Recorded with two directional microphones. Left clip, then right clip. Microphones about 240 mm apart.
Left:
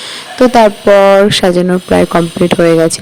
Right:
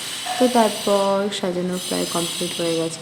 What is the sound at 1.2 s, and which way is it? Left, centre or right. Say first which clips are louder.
Speech: left 15 dB; left.